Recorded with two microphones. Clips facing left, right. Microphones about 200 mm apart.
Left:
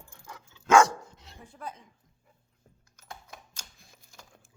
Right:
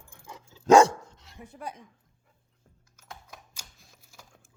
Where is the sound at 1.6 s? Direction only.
15° right (ahead or behind).